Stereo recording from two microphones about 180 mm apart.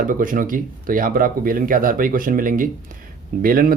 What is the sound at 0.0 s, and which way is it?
Speech, 50° right (ahead or behind).